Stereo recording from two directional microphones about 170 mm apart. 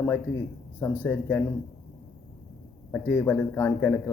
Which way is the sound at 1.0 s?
15° left (ahead or behind).